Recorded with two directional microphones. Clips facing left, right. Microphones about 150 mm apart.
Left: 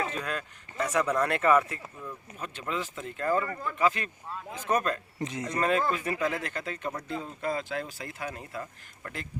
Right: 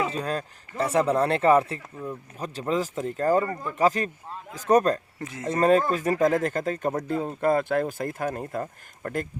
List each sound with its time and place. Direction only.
0.1 s speech: 35° right (ahead or behind)
5.2 s speech: 15° left (ahead or behind)
5.5 s speech: 40° right (ahead or behind)